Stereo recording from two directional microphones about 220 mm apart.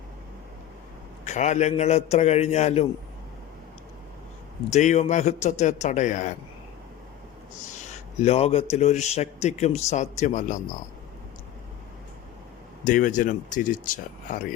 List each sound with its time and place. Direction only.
1.2 s a man's voice: 30° left (ahead or behind)
4.7 s speech: 30° left (ahead or behind)
8.2 s speech: 30° left (ahead or behind)
12.8 s speech: 35° left (ahead or behind)